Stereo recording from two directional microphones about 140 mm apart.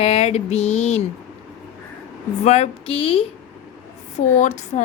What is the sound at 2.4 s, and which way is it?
Speech, 50° left (ahead or behind).